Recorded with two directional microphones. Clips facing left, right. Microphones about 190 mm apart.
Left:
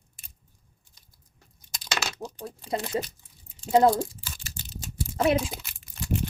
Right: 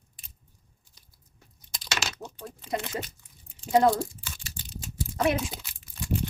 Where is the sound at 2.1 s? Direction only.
35° left (ahead or behind).